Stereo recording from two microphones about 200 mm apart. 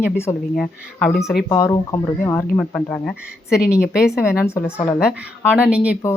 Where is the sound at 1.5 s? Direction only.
15° left (ahead or behind).